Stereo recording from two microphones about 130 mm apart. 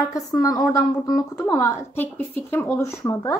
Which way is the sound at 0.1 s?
30° left (ahead or behind).